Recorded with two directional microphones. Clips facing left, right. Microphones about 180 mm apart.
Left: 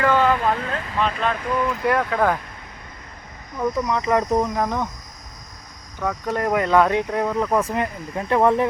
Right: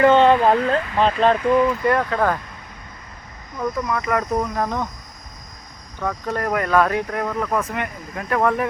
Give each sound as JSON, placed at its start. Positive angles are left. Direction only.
{"t": 0.0, "sound": "speech", "side_deg": -25}
{"t": 1.8, "sound": "speech", "side_deg": 0}
{"t": 3.6, "sound": "speech", "side_deg": 10}
{"t": 3.9, "sound": "speech", "side_deg": 25}
{"t": 6.0, "sound": "speech", "side_deg": 10}